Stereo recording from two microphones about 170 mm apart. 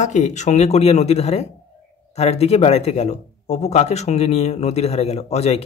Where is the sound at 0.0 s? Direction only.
45° left (ahead or behind).